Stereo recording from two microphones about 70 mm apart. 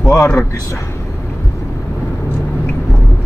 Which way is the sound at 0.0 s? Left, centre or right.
Left.